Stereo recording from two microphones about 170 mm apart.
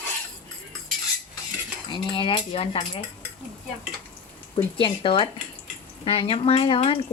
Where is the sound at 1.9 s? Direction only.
30° left (ahead or behind).